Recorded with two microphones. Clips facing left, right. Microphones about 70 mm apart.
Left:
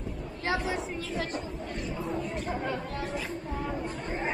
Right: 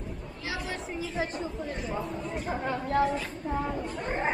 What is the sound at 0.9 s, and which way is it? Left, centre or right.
A woman's voice, centre.